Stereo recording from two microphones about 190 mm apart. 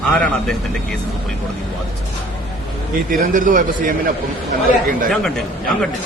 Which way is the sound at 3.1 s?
45° right (ahead or behind).